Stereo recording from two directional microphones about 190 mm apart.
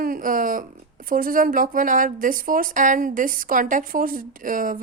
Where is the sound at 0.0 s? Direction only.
45° right (ahead or behind).